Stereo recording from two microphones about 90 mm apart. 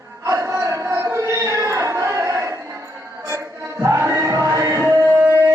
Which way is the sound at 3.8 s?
30° right (ahead or behind).